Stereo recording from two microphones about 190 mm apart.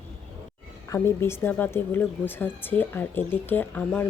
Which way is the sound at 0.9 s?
15° left (ahead or behind).